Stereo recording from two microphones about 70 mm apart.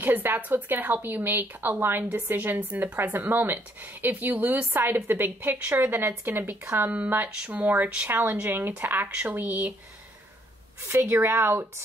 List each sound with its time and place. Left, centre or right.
0.0 s speech: right
10.9 s a woman's voice: right